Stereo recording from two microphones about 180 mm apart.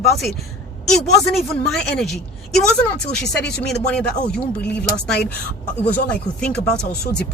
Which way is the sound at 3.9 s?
5° left (ahead or behind).